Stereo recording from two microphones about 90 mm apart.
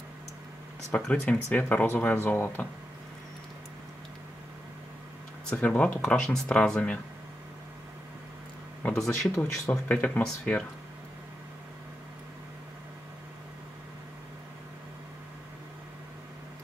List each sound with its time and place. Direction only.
0.9 s speech: 15° left (ahead or behind)
5.5 s speech: 15° left (ahead or behind)
8.9 s speech: 5° left (ahead or behind)
9.4 s speech: 15° left (ahead or behind)